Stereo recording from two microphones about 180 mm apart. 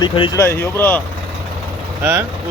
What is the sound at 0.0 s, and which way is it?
Speech, 25° left (ahead or behind).